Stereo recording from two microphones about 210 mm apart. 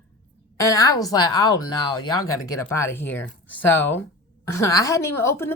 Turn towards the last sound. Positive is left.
turn(degrees=10)  # may be behind; listen again after turning